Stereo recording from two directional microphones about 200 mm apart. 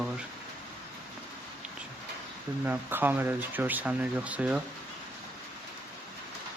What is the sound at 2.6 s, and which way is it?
Speech, 10° right (ahead or behind).